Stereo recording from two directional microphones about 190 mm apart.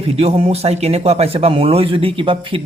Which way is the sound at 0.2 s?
30° right (ahead or behind).